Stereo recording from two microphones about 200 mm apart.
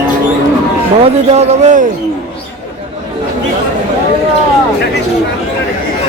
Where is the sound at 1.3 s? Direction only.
35° right (ahead or behind).